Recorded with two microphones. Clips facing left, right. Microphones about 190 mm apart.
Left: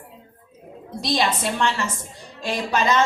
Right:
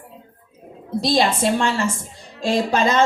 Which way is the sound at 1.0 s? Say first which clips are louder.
Right 4 dB; 30° right (ahead or behind).